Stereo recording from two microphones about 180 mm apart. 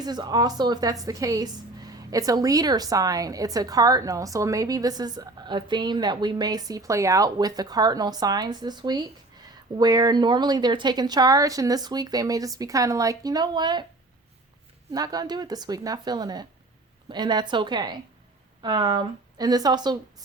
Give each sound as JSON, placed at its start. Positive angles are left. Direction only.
{"t": 0.0, "sound": "a woman's voice", "side_deg": -20}
{"t": 14.9, "sound": "a woman's voice", "side_deg": -20}